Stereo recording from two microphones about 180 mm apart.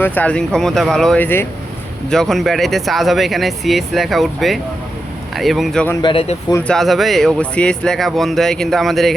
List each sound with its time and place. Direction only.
0.0 s speech: 10° left (ahead or behind)
6.0 s speech: 30° left (ahead or behind)
6.7 s speech: centre (ahead or behind)